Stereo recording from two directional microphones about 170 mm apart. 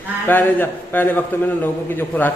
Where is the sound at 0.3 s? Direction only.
10° left (ahead or behind).